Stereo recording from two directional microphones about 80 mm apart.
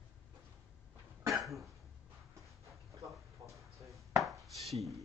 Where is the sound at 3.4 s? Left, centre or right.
Right.